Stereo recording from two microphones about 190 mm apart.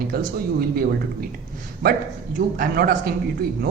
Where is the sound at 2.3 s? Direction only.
45° right (ahead or behind).